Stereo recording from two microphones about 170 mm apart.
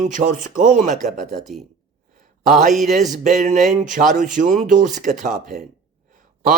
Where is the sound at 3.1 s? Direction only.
50° right (ahead or behind).